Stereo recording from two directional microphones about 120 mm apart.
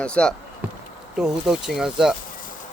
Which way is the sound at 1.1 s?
5° right (ahead or behind).